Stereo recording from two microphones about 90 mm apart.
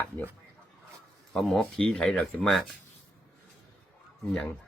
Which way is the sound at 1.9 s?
15° left (ahead or behind).